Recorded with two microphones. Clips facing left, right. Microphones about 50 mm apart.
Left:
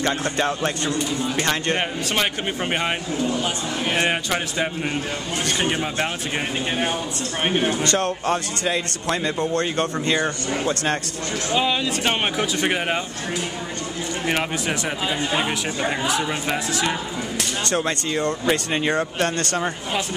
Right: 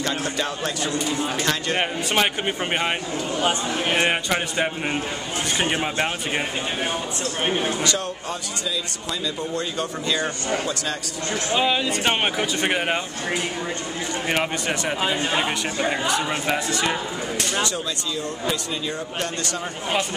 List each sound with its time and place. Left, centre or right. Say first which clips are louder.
0.0 s speech: left 3 dB; left
1.8 s speech: right 1 dB; centre
3.3 s speech: right 2 dB; centre
3.9 s speech: even; centre
7.4 s speech: left 3 dB; centre
7.8 s a man's voice: left 4 dB; left
10.0 s speech: left 1 dB; left
11.5 s speech: even; centre
14.2 s speech: left 1 dB; centre
17.6 s a man's voice: left 5 dB; left